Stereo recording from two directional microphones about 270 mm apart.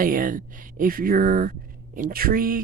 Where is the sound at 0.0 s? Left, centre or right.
Right.